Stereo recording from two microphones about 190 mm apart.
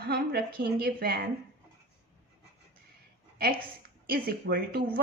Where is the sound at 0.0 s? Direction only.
55° right (ahead or behind).